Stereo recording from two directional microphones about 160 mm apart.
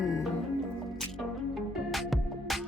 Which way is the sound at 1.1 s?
Centre (ahead or behind).